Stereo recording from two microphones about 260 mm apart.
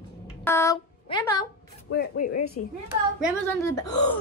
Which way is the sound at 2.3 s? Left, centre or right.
Left.